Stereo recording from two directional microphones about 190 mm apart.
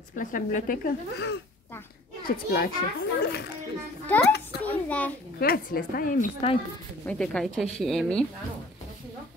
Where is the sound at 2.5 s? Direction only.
55° left (ahead or behind).